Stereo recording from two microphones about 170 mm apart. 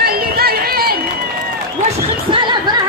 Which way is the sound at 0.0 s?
65° right (ahead or behind).